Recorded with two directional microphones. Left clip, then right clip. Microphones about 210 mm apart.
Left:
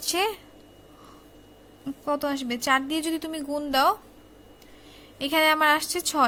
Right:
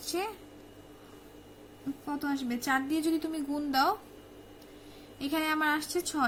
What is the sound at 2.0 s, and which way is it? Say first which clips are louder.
A woman's voice: left 8 dB; 45° left (ahead or behind).